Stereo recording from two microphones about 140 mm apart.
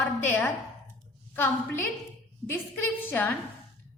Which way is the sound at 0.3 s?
10° left (ahead or behind).